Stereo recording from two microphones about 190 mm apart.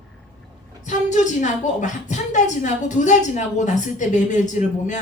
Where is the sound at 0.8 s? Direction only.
40° left (ahead or behind).